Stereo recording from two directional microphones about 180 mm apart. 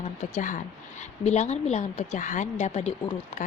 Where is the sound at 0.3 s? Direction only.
45° left (ahead or behind).